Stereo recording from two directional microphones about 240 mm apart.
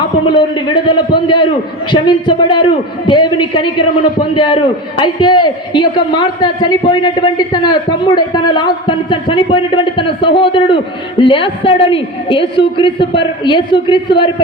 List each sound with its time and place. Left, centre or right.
0.3 s a man's voice: centre